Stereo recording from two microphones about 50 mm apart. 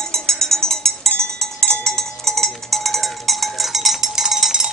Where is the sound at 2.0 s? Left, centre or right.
Centre.